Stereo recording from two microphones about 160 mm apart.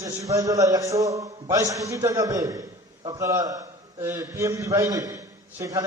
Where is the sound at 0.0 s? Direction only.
20° right (ahead or behind).